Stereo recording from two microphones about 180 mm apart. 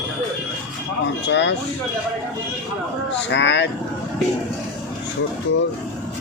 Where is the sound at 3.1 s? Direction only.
75° left (ahead or behind).